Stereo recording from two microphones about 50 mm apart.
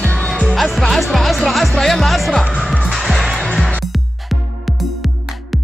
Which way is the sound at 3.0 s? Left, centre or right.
Centre.